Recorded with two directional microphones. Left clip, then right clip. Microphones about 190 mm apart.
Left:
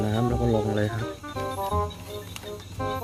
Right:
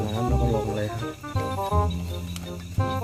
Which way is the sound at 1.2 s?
Centre (ahead or behind).